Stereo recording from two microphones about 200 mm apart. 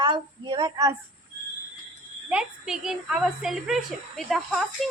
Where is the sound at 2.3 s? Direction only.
5° right (ahead or behind).